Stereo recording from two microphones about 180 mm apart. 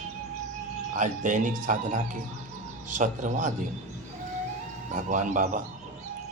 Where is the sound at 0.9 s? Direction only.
45° right (ahead or behind).